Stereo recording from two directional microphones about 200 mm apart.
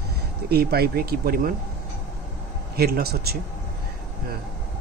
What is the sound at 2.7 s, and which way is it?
Speech, 50° right (ahead or behind).